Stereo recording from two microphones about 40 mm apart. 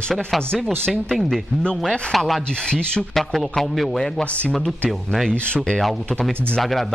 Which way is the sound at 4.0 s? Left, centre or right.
Left.